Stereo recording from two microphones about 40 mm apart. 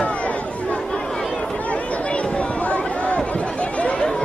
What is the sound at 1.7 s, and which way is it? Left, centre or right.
Chatter, left.